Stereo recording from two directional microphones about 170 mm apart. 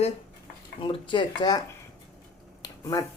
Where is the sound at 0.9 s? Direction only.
30° left (ahead or behind).